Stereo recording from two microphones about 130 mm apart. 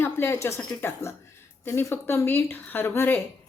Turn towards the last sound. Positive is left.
turn(degrees=15)  # may be behind; listen again after turning